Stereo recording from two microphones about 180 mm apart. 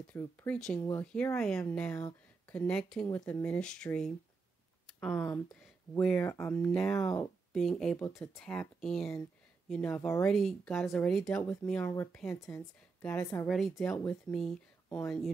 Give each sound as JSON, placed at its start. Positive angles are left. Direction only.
{"t": 0.1, "sound": "speech", "side_deg": 5}
{"t": 2.0, "sound": "a sound", "side_deg": 20}
{"t": 2.5, "sound": "speech", "side_deg": 5}
{"t": 7.5, "sound": "speech", "side_deg": 5}
{"t": 10.3, "sound": "speech", "side_deg": 0}